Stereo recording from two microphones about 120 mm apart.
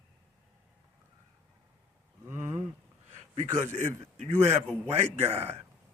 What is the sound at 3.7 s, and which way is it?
A man's voice, 75° right (ahead or behind).